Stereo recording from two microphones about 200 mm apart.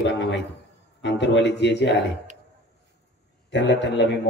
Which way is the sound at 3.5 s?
65° left (ahead or behind).